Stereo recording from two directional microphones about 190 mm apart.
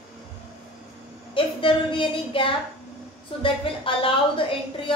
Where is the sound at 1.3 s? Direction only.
25° left (ahead or behind).